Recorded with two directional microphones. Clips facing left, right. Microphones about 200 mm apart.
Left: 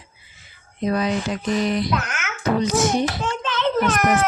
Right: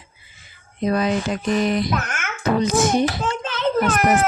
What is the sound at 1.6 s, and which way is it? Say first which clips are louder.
Speech: right 1 dB; 50° right (ahead or behind).